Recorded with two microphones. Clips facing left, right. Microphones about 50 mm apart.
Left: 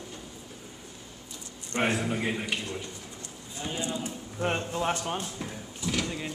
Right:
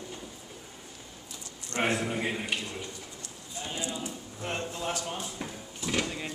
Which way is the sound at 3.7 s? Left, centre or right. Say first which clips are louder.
Left 3 dB; left.